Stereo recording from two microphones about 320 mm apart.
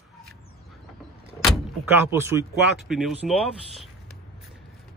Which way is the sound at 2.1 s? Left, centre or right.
Centre.